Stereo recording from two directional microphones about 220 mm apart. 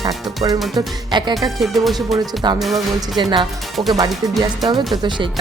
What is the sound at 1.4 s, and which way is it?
Speech, centre (ahead or behind).